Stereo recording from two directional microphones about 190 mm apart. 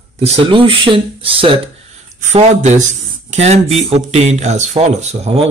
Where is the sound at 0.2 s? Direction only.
30° right (ahead or behind).